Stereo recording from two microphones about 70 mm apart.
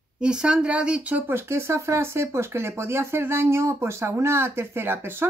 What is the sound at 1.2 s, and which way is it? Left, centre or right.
Speech, right.